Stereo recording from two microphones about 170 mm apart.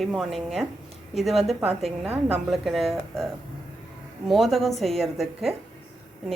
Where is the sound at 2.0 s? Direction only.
35° right (ahead or behind).